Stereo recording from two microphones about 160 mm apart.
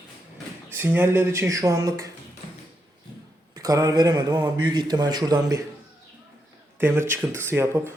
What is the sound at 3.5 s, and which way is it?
Speech, 20° right (ahead or behind).